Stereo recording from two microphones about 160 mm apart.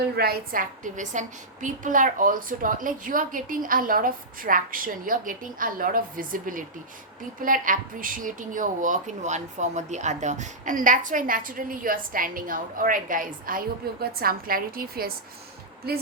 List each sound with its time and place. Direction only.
0.2 s a woman's voice: 65° right (ahead or behind)